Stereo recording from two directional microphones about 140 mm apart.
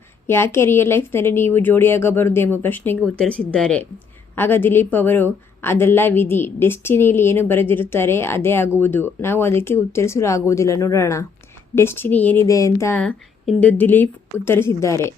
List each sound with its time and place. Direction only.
0.3 s a woman's voice: 20° left (ahead or behind)
12.5 s a woman's voice: 20° left (ahead or behind)